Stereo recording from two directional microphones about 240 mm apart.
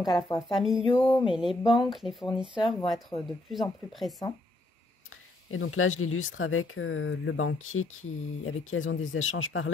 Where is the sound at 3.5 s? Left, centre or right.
Centre.